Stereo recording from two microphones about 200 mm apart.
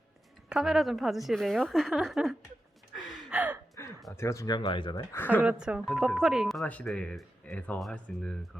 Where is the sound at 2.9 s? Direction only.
Centre (ahead or behind).